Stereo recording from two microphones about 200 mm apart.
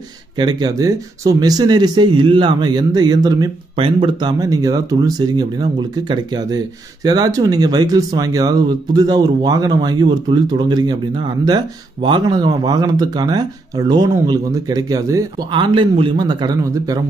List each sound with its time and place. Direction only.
0.4 s speech: 20° right (ahead or behind)